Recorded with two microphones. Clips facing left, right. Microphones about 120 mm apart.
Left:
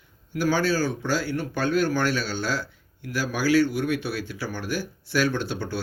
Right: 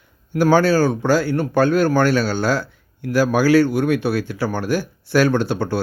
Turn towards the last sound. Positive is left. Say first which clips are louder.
# right 8 dB
turn(degrees=-65)  # may be behind; listen again after turning